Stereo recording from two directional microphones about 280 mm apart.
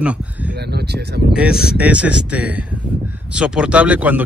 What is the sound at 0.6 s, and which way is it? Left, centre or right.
Speech, right.